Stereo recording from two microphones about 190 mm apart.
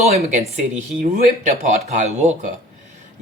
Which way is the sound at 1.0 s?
45° right (ahead or behind).